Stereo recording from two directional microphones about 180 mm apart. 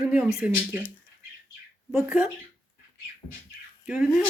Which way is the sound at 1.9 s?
10° right (ahead or behind).